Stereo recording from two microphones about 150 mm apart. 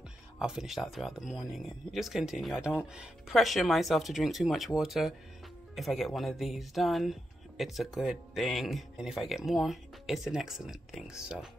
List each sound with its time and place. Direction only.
0.4 s speech: 5° right (ahead or behind)